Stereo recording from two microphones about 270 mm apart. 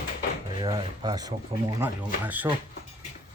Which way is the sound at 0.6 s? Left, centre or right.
Centre.